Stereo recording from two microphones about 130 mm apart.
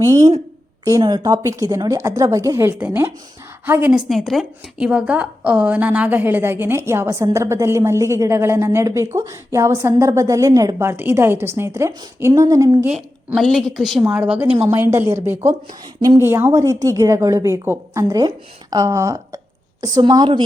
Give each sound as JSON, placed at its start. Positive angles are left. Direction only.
{"t": 0.0, "sound": "a woman's voice", "side_deg": -25}
{"t": 4.1, "sound": "a woman's voice", "side_deg": 0}
{"t": 12.9, "sound": "a woman's voice", "side_deg": 0}
{"t": 14.0, "sound": "a woman's voice", "side_deg": -10}